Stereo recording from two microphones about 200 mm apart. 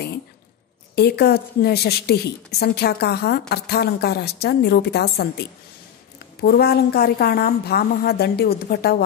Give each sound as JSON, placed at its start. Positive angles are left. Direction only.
{"t": 0.9, "sound": "a woman's voice", "side_deg": 55}